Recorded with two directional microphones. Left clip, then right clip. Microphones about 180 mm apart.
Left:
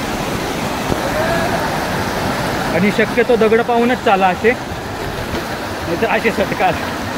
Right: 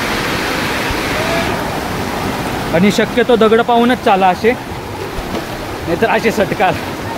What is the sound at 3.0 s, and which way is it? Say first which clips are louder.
Speech: right 1 dB; 30° right (ahead or behind).